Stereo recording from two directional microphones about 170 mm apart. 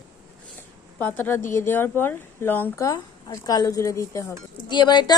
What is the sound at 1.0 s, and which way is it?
A woman's voice, 10° left (ahead or behind).